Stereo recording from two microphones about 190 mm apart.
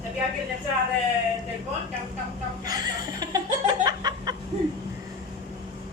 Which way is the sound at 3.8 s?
20° right (ahead or behind).